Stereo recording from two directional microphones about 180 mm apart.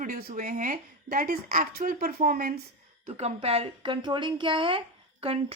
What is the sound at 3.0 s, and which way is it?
Speech, 35° right (ahead or behind).